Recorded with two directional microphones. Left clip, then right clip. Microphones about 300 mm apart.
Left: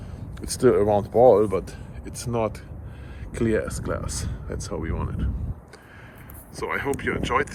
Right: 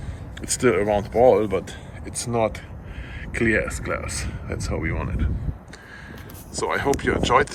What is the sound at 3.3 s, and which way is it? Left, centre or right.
Speech, left.